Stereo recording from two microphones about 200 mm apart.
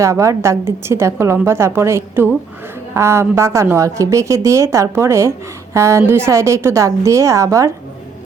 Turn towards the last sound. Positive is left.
turn(degrees=-15)  # may be behind; listen again after turning